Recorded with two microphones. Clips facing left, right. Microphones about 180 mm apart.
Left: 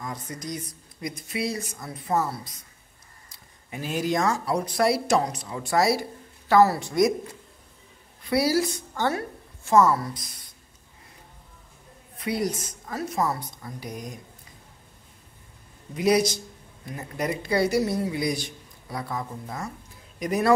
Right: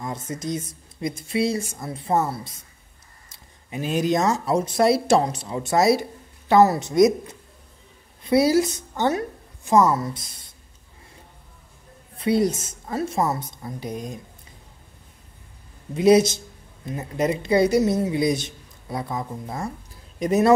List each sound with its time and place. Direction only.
0.0 s a woman's voice: 25° right (ahead or behind)
12.2 s a woman's voice: 25° right (ahead or behind)
15.9 s a woman's voice: 25° right (ahead or behind)